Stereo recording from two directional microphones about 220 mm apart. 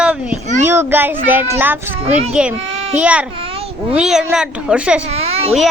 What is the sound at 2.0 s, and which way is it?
Speech, 30° right (ahead or behind).